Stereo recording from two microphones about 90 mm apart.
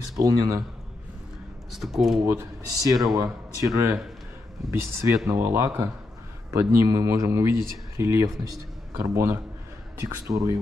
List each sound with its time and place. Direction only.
0.2 s speech: 40° right (ahead or behind)
1.7 s speech: centre (ahead or behind)
2.2 s speech: 35° right (ahead or behind)